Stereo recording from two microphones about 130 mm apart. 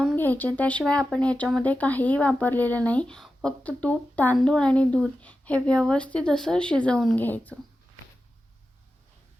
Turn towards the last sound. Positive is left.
turn(degrees=15)  # may be behind; listen again after turning